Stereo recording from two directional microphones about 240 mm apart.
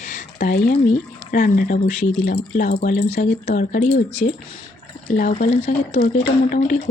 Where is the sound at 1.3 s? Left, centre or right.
Left.